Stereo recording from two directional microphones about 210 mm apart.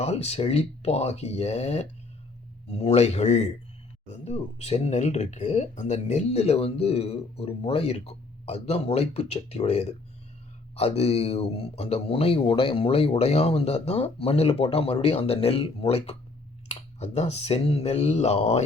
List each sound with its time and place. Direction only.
0.0 s speech: 30° left (ahead or behind)